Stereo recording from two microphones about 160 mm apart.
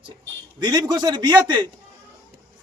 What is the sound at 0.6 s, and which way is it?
A man's voice, 25° right (ahead or behind).